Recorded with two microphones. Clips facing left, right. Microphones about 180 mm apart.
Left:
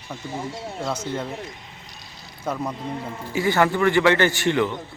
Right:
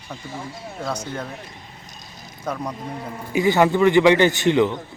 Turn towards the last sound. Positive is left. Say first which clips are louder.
# right 4 dB
turn(degrees=-20)  # may be behind; listen again after turning